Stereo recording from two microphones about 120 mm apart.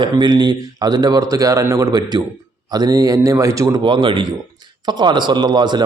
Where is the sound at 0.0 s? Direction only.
40° right (ahead or behind).